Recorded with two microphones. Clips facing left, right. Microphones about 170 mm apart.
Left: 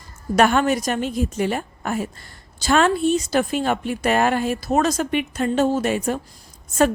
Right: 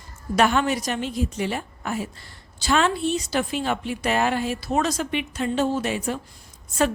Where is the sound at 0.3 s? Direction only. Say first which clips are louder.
Left 3 dB; 50° left (ahead or behind).